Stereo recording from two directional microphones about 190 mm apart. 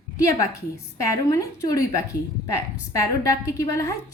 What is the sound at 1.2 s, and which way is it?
Speech, 20° left (ahead or behind).